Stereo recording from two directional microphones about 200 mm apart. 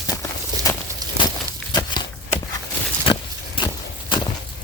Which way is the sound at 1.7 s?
20° left (ahead or behind).